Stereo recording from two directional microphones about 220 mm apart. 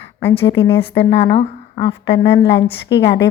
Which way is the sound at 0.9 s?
50° left (ahead or behind).